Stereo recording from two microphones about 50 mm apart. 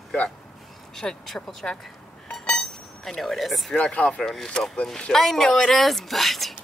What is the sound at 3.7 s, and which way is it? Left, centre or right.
Speech, left.